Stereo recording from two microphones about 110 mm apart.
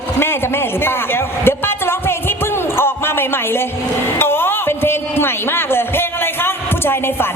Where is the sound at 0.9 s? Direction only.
20° left (ahead or behind).